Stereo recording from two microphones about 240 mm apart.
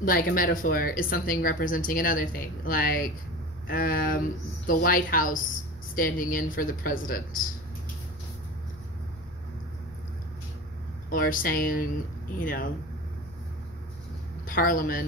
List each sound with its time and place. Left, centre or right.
0.0 s speech: left
11.1 s speech: left
14.4 s speech: left